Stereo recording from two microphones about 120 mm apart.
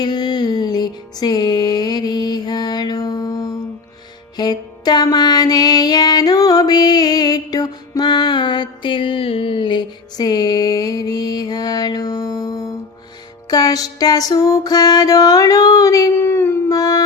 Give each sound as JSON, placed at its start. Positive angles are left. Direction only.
{"t": 0.0, "sound": "music", "side_deg": 35}